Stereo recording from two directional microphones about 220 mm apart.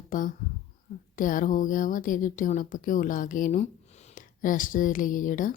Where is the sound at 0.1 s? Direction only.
35° left (ahead or behind).